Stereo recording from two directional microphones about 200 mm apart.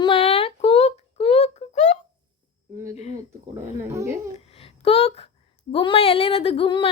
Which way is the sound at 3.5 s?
15° right (ahead or behind).